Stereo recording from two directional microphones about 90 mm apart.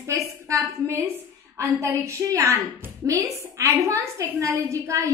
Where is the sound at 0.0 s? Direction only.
35° right (ahead or behind).